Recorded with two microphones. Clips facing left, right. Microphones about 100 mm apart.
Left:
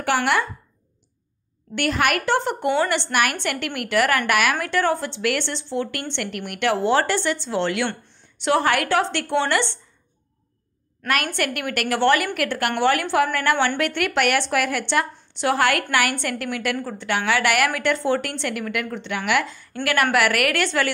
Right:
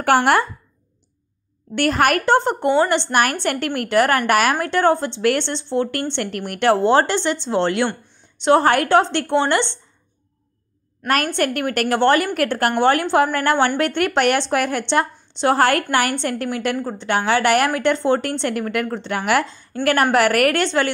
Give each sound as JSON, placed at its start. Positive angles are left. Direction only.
{"t": 0.0, "sound": "speech", "side_deg": -45}
{"t": 1.8, "sound": "a woman's voice", "side_deg": -40}
{"t": 11.1, "sound": "a woman's voice", "side_deg": -35}
{"t": 19.5, "sound": "a woman's voice", "side_deg": -30}